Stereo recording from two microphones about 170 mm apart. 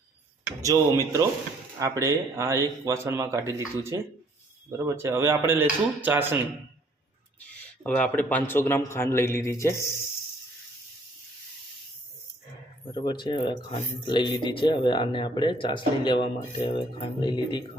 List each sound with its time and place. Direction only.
0.6 s speech: 20° right (ahead or behind)
7.9 s a man's voice: 10° left (ahead or behind)
12.9 s speech: 25° left (ahead or behind)